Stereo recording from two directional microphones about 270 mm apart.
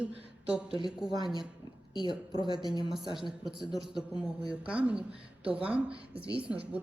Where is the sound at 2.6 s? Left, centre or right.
Centre.